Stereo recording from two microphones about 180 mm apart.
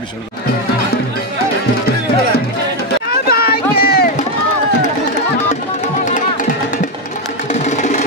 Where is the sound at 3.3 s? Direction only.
60° left (ahead or behind).